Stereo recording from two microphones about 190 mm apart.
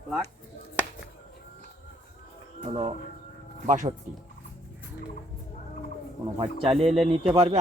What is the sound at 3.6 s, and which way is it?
Speech, 40° right (ahead or behind).